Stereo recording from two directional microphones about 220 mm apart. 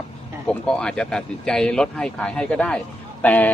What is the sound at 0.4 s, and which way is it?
Speech, 5° left (ahead or behind).